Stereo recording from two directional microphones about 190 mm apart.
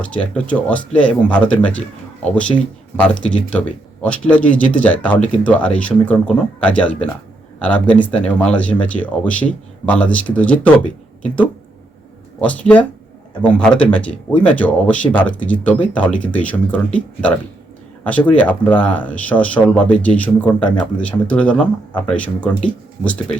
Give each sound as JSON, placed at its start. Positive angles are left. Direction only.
{"t": 0.0, "sound": "speech", "side_deg": 5}
{"t": 3.0, "sound": "speech", "side_deg": 5}